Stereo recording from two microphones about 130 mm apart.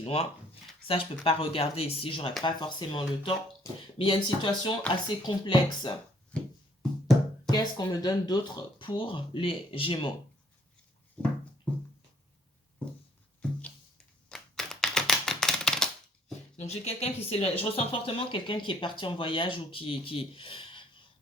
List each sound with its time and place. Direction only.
0.0 s speech: 45° left (ahead or behind)
7.5 s speech: 30° left (ahead or behind)
11.2 s a sound: 10° left (ahead or behind)
14.3 s typewriter: 5° left (ahead or behind)
16.6 s speech: 55° left (ahead or behind)